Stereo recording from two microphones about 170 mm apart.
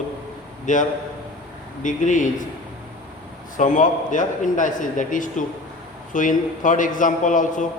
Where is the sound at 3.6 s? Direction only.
50° left (ahead or behind).